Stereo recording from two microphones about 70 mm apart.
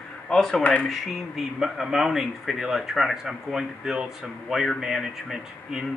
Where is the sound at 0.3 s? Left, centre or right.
Centre.